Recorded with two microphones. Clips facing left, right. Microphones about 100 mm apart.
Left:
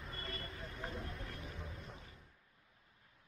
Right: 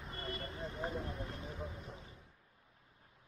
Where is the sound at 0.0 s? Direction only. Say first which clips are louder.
Right 3 dB; 25° right (ahead or behind).